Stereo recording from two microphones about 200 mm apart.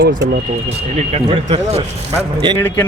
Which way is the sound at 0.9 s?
30° right (ahead or behind).